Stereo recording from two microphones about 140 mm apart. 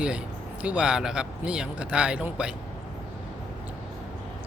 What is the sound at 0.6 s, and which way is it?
Speech, 10° right (ahead or behind).